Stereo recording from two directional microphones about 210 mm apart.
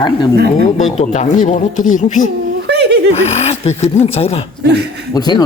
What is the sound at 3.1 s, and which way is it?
Speech, 30° left (ahead or behind).